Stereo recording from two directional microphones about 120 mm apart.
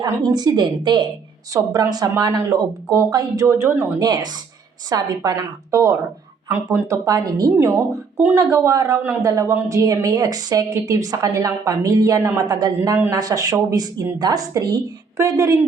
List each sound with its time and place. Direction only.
0.0 s speech: 35° right (ahead or behind)
3.4 s a woman's voice: 20° right (ahead or behind)
3.9 s a woman's voice: 35° right (ahead or behind)